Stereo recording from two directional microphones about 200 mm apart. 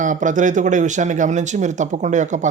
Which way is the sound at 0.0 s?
40° right (ahead or behind).